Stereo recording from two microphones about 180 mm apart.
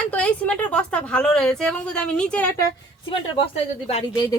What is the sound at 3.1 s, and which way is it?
Speech, 30° left (ahead or behind).